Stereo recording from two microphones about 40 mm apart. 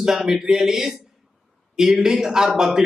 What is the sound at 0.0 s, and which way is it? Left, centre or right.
A man's voice, centre.